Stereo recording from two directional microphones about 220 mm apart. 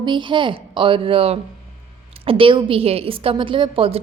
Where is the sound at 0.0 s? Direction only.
20° right (ahead or behind).